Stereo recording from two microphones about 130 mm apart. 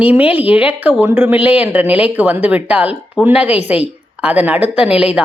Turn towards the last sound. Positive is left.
turn(degrees=-10)  # may be behind; listen again after turning